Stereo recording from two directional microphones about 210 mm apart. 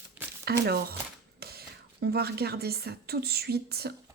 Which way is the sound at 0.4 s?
50° right (ahead or behind).